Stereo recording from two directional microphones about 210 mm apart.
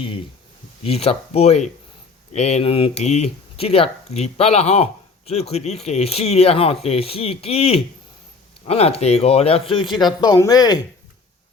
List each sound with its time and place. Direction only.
0.8 s speech: 30° left (ahead or behind)